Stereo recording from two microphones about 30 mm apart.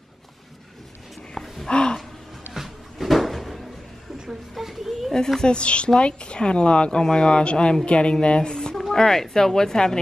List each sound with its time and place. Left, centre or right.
1.3 s gasp: centre
1.7 s gasp: left
2.5 s music: centre
4.3 s speech: centre
5.4 s speech: left
8.9 s speech: centre